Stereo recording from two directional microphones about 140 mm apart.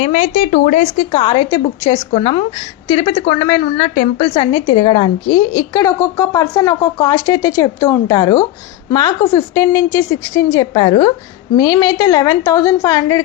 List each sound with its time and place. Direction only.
0.0 s a woman's voice: 50° left (ahead or behind); by 2.0 s 30° left (ahead or behind)
2.1 s a woman's voice: 45° left (ahead or behind)
3.8 s speech: 55° left (ahead or behind)
4.4 s a woman's voice: 35° left (ahead or behind)
5.5 s a woman's voice: 25° left (ahead or behind)